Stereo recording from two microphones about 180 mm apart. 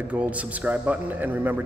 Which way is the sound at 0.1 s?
10° right (ahead or behind).